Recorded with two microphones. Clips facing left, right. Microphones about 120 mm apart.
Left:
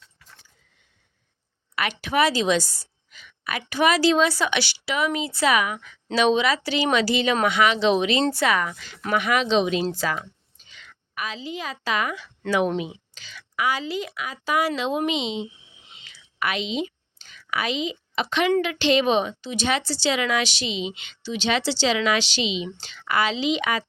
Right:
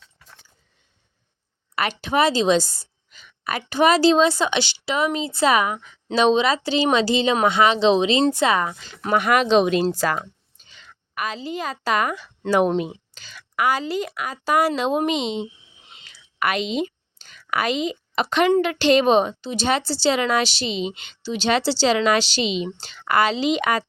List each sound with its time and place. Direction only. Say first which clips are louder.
1.7 s a woman's voice: right 2 dB; 35° right (ahead or behind)
9.1 s a woman's voice: right 4 dB; 45° right (ahead or behind)
9.8 s a sound: right 4 dB; 40° right (ahead or behind)
11.1 s a woman's voice: right 4 dB; 45° right (ahead or behind)
15.9 s a sound: right 2 dB; 45° right (ahead or behind)
18.6 s a woman's voice: right 4 dB; 40° right (ahead or behind)